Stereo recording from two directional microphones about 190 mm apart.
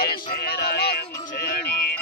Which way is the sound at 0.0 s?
55° left (ahead or behind).